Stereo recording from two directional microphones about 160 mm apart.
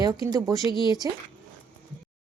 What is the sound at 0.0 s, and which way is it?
Speech, 20° right (ahead or behind).